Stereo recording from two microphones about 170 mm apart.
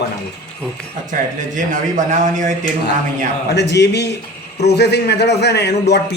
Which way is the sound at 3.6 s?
85° left.